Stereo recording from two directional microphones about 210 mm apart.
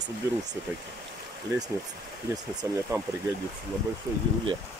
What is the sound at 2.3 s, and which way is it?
Speech, 15° right (ahead or behind).